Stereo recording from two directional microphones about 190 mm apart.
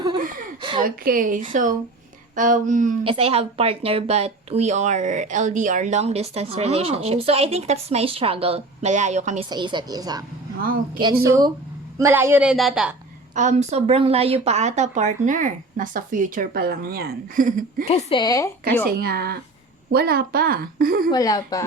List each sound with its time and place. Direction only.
0.8 s a woman's voice: 45° right (ahead or behind)
3.0 s speech: 30° right (ahead or behind)
9.5 s a woman's voice: 25° right (ahead or behind)
10.6 s a woman's voice: 50° right (ahead or behind)
11.3 s a woman's voice: 15° right (ahead or behind); by 12.9 s centre (ahead or behind)
13.3 s speech: 40° right (ahead or behind)
17.8 s a woman's voice: 30° left (ahead or behind)
18.9 s a woman's voice: 55° right (ahead or behind)
21.1 s a woman's voice: 20° left (ahead or behind)